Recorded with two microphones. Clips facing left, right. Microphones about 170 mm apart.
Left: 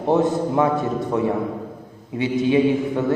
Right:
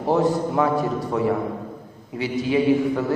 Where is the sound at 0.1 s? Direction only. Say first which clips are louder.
Left 1 dB; 20° left (ahead or behind).